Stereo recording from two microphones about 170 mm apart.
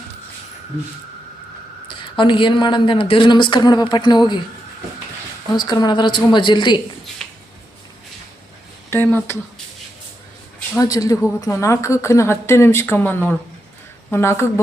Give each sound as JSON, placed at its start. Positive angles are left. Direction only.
{"t": 1.9, "sound": "speech", "side_deg": 30}
{"t": 5.5, "sound": "speech", "side_deg": 25}
{"t": 7.2, "sound": "a sound", "side_deg": 0}
{"t": 8.9, "sound": "a woman's voice", "side_deg": 10}
{"t": 10.8, "sound": "a woman's voice", "side_deg": 20}